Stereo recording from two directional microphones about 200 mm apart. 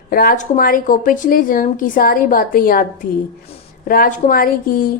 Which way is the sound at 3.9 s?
45° left (ahead or behind).